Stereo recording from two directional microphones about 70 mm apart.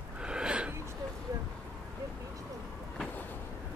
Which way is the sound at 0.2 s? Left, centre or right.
Centre.